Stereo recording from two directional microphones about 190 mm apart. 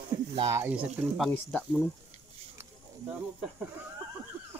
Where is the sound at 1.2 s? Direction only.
5° left (ahead or behind).